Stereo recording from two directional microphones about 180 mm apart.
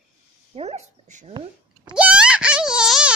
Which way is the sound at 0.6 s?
40° right (ahead or behind).